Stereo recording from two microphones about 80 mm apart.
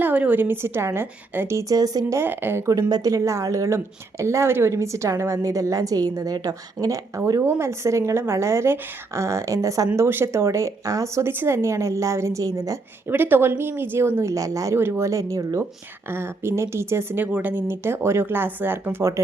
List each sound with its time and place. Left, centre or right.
0.0 s speech: right
1.5 s a woman's voice: right
2.1 s speech: right
2.9 s a woman's voice: right
7.4 s a woman's voice: right
13.1 s speech: right
14.8 s a woman's voice: right
16.0 s a woman's voice: right